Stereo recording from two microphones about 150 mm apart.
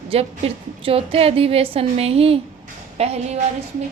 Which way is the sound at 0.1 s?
40° right (ahead or behind).